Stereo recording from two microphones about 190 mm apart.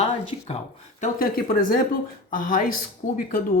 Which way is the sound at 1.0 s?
50° left (ahead or behind).